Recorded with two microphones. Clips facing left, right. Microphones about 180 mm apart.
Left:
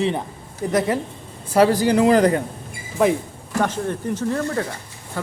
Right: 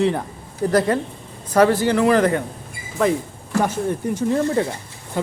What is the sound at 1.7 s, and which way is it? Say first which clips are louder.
Speech: left 1 dB; 15° left (ahead or behind).